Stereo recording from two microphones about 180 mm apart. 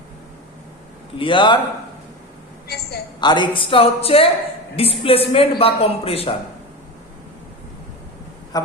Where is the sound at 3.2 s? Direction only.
25° left (ahead or behind).